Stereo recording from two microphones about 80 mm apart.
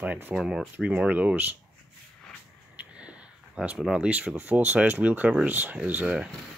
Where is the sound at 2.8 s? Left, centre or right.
Centre.